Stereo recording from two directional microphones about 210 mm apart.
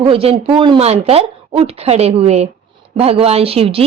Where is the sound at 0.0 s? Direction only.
25° right (ahead or behind).